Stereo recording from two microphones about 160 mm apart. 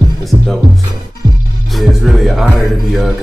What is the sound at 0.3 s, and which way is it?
Speech, 25° right (ahead or behind).